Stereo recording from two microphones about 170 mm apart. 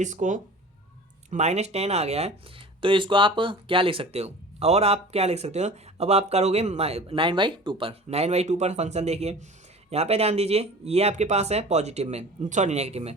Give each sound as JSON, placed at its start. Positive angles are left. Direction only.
{"t": 0.0, "sound": "speech", "side_deg": -45}